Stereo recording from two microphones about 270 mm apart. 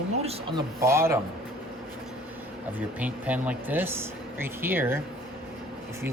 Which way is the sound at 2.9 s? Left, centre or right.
Centre.